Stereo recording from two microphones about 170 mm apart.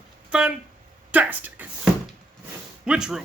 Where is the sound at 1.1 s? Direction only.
10° right (ahead or behind).